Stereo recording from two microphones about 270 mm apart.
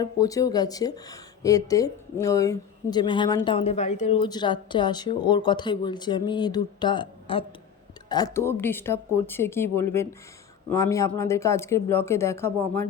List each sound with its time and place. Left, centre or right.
0.0 s speech: centre